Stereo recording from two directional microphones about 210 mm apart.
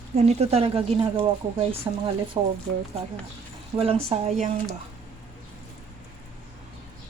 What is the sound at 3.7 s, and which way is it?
Speech, 30° right (ahead or behind).